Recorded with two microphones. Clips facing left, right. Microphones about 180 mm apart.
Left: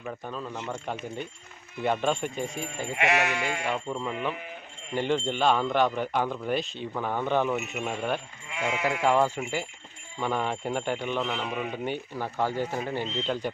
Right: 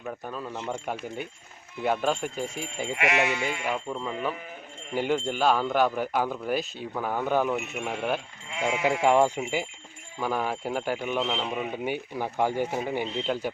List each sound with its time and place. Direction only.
0.0 s speech: 5° right (ahead or behind)
2.9 s speech: 25° left (ahead or behind)
3.7 s speech: centre (ahead or behind)
10.2 s speech: 5° right (ahead or behind)